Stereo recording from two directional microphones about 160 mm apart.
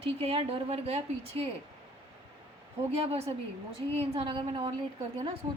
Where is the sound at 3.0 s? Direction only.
40° right (ahead or behind).